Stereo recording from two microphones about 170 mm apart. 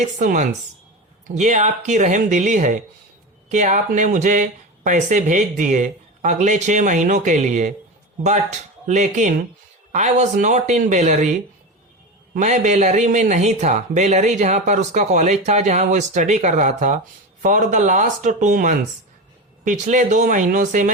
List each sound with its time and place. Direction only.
0.0 s speech: 45° right (ahead or behind)
8.9 s speech: 45° right (ahead or behind)